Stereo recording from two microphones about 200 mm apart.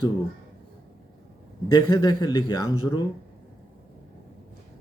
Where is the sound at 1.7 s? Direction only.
20° left (ahead or behind).